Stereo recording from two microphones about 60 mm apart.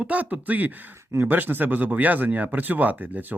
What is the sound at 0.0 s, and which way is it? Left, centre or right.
Speech, right.